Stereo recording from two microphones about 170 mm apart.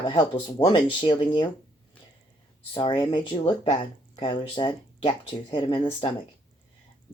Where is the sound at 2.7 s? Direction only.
25° left (ahead or behind).